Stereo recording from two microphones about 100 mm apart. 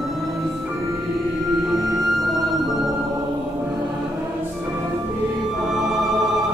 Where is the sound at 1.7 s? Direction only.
Centre (ahead or behind).